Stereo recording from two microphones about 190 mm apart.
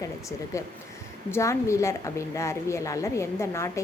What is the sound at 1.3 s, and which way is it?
A woman's voice, 15° left (ahead or behind).